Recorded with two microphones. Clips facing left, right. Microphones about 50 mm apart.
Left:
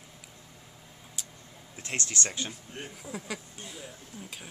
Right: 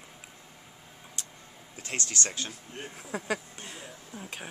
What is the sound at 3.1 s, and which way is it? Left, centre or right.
Speech, right.